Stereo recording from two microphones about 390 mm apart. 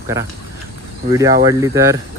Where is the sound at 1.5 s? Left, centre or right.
Centre.